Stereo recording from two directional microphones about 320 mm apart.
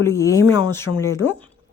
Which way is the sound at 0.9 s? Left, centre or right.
Left.